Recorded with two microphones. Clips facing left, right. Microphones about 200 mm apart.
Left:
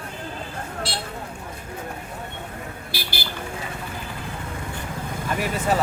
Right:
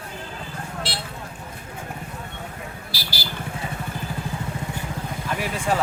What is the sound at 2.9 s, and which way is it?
Vehicle, 55° left (ahead or behind).